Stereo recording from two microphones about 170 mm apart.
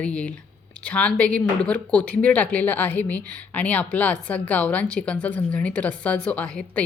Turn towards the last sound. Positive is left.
turn(degrees=10)  # may be behind; listen again after turning